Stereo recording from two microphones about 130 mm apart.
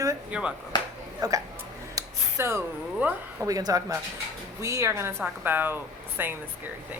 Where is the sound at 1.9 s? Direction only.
20° right (ahead or behind).